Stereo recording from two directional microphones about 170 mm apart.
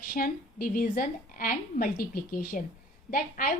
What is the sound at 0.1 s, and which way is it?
A woman's voice, 60° left (ahead or behind).